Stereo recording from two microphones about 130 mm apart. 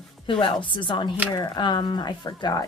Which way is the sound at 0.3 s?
40° left (ahead or behind).